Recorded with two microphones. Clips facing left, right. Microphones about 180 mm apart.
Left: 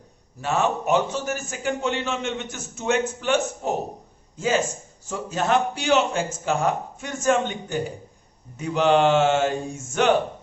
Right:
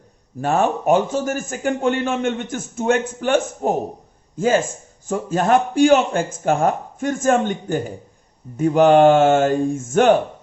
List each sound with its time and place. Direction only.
0.4 s a man's voice: 50° right (ahead or behind)